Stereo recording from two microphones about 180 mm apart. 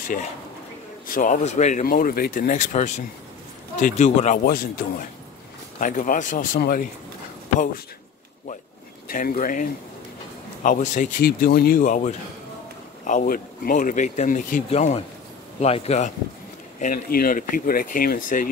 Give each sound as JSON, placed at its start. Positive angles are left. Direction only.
{"t": 1.0, "sound": "speech", "side_deg": 50}
{"t": 9.1, "sound": "speech", "side_deg": 50}
{"t": 16.8, "sound": "speech", "side_deg": 50}